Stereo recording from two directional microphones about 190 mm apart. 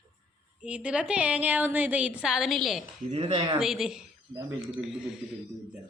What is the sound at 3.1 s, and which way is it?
Speech, 30° right (ahead or behind).